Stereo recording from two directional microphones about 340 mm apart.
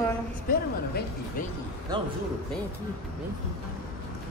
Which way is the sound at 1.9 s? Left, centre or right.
Centre.